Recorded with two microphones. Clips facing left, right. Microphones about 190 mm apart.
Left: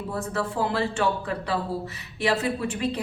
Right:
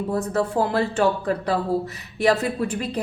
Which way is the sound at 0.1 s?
45° right (ahead or behind).